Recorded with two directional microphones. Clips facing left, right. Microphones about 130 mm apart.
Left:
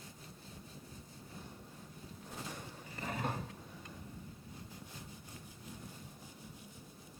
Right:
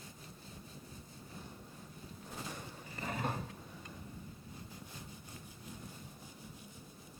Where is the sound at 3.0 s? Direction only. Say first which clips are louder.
Right 1 dB; 25° right (ahead or behind).